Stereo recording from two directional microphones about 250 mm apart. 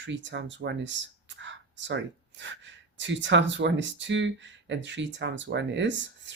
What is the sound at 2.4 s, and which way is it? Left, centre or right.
Speech, right.